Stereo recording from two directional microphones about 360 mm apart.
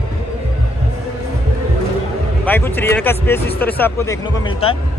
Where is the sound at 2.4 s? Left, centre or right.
Centre.